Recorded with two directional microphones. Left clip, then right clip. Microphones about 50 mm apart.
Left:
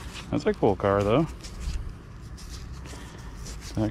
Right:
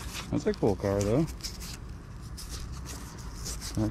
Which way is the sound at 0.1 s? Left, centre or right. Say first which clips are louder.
Left 3 dB; right.